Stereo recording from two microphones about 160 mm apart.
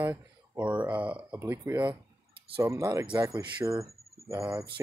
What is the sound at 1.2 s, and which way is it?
Speech, 20° right (ahead or behind).